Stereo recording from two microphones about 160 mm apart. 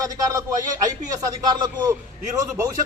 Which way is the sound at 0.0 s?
20° right (ahead or behind).